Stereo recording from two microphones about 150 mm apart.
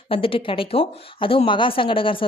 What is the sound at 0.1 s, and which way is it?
Speech, 35° left (ahead or behind).